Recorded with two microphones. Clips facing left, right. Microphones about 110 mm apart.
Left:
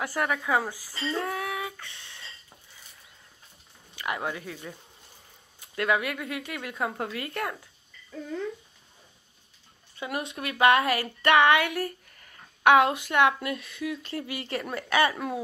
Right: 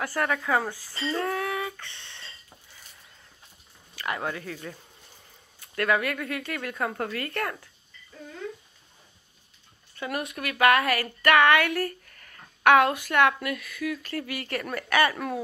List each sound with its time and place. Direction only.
0.0 s speech: 10° left (ahead or behind)
1.0 s a sound: centre (ahead or behind)
3.9 s speech: 15° left (ahead or behind)
9.9 s speech: 20° left (ahead or behind)